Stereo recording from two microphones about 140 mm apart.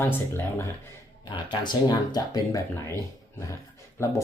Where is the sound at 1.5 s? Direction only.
30° left (ahead or behind).